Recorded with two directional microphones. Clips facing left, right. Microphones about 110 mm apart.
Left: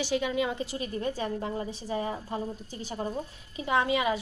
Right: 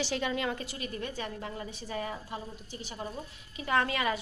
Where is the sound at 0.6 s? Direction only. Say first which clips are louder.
Left 5 dB; 30° left (ahead or behind).